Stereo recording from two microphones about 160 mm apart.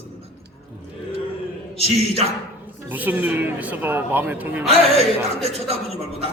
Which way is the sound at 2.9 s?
10° right (ahead or behind).